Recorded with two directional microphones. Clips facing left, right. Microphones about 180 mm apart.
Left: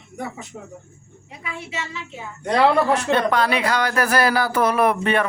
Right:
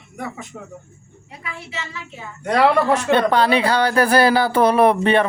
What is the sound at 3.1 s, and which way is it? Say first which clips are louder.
Speech: right 6 dB; 30° right (ahead or behind).